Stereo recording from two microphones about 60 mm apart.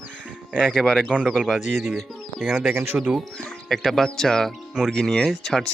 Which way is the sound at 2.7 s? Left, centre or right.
Right.